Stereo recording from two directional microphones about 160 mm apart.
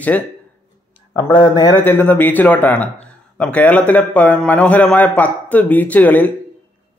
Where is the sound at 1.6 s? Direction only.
15° left (ahead or behind).